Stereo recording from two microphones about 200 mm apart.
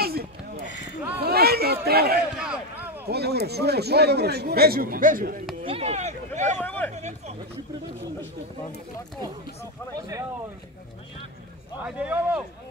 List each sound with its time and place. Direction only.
0.0 s a sound: 50° right (ahead or behind)
1.9 s a man's voice: 50° right (ahead or behind)
2.3 s a sound: 5° right (ahead or behind)
3.1 s a man's voice: 55° right (ahead or behind)
5.7 s a sound: 30° right (ahead or behind)
6.5 s speech: 10° left (ahead or behind)
7.0 s speech: 35° right (ahead or behind)
9.9 s speech: 15° right (ahead or behind)
11.8 s speech: 5° right (ahead or behind)